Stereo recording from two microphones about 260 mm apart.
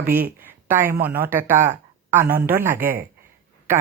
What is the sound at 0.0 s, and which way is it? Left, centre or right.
Speech, right.